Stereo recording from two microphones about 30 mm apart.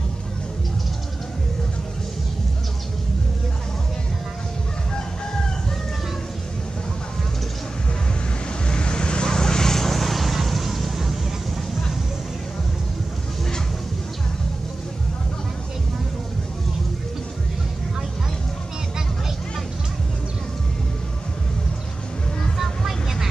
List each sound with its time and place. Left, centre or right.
8.6 s vehicle: left; by 11.1 s centre
22.6 s vehicle: centre